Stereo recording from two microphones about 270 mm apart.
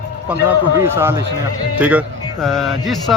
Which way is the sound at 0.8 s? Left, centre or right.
Centre.